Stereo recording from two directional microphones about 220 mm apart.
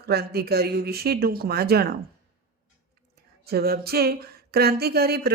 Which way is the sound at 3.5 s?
45° right (ahead or behind).